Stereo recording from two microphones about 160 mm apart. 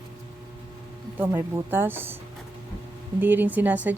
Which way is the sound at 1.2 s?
15° right (ahead or behind).